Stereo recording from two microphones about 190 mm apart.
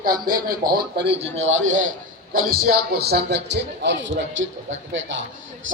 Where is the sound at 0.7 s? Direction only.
55° right (ahead or behind).